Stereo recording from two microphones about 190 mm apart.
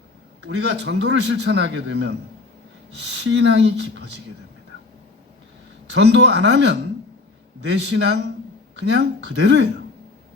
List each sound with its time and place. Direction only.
0.4 s a man's voice: 65° right (ahead or behind)
5.9 s a man's voice: 70° right (ahead or behind)
7.7 s a man's voice: 65° right (ahead or behind)